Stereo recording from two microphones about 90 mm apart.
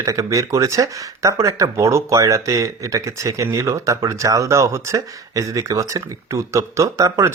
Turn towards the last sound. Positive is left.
turn(degrees=-35)  # may be behind; listen again after turning